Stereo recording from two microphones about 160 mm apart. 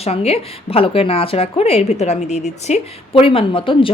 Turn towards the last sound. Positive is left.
turn(degrees=35)  # may be behind; listen again after turning